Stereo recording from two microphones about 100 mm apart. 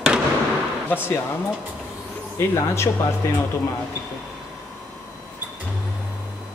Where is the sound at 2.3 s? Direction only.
25° left (ahead or behind).